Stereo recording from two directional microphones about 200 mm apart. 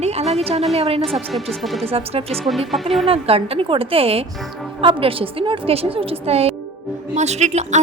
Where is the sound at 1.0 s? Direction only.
Centre (ahead or behind).